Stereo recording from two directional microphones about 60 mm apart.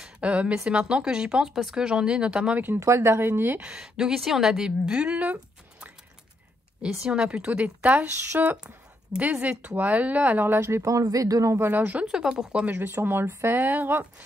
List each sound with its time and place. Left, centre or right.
0.0 s a woman's voice: right
2.8 s speech: right
3.6 s a woman's voice: centre; by 8.5 s right
9.2 s a woman's voice: right
10.4 s speech: right
10.9 s speech: right
11.6 s a woman's voice: right
12.1 s a woman's voice: centre
12.7 s speech: right